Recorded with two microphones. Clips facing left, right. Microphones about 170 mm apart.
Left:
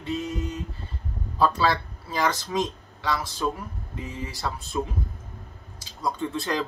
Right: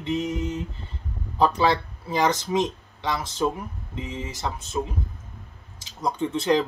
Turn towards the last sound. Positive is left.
turn(degrees=-20)  # may be behind; listen again after turning